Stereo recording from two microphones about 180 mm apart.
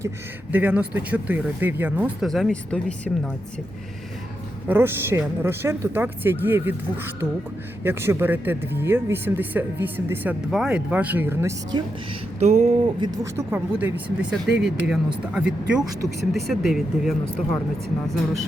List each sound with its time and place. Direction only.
0.5 s speech: 10° right (ahead or behind)
2.2 s speech: centre (ahead or behind)
4.7 s speech: 10° right (ahead or behind)
11.7 s speech: 25° right (ahead or behind)
12.4 s a sound: 40° right (ahead or behind)
13.0 s speech: 20° right (ahead or behind)
13.5 s speech: 10° right (ahead or behind)